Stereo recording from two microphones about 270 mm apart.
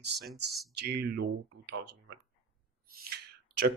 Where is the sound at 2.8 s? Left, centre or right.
Right.